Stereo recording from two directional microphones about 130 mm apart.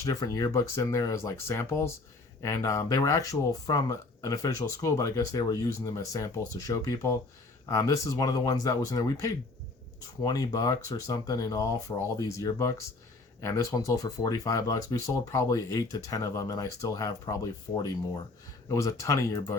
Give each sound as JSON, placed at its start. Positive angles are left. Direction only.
{"t": 0.0, "sound": "speech", "side_deg": 25}